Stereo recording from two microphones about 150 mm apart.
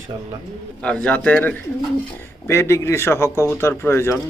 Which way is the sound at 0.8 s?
10° left (ahead or behind).